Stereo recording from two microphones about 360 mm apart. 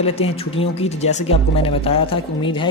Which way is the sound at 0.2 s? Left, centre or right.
Centre.